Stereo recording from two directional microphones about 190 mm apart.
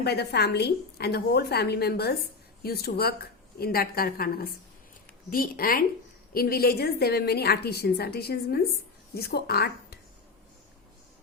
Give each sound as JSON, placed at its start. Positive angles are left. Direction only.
{"t": 0.0, "sound": "a woman's voice", "side_deg": 60}